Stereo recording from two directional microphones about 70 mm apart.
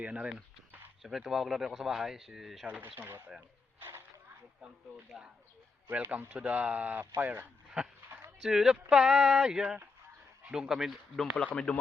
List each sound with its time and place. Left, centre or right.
0.0 s speech: centre
1.0 s speech: centre
2.6 s speech: right
3.8 s a sound: right
5.9 s speech: right
7.8 s speech: centre
11.3 s speech: centre